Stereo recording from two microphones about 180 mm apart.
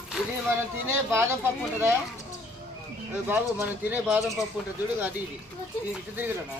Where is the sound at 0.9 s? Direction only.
15° right (ahead or behind).